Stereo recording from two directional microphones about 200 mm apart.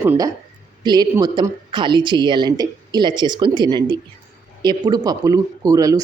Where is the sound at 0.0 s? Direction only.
15° right (ahead or behind).